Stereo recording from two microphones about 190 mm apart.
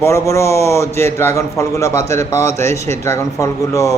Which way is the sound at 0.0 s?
15° left (ahead or behind).